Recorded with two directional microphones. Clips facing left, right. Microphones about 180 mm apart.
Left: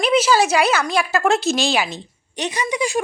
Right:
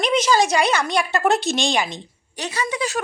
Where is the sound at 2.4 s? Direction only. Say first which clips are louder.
Left 3 dB; 20° left (ahead or behind).